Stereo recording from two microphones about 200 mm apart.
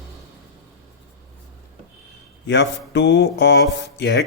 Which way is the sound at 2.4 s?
60° left (ahead or behind).